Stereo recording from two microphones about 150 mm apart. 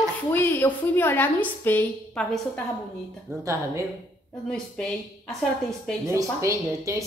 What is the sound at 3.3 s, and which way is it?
Speech, 20° right (ahead or behind).